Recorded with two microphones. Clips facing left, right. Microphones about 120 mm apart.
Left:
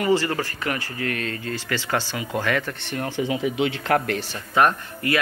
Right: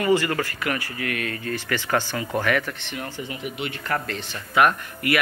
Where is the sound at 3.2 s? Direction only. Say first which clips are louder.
Left 11 dB; 90° left; by 4.2 s 65° left (ahead or behind).